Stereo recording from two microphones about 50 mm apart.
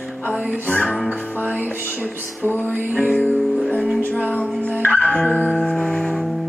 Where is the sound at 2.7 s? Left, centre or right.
Right.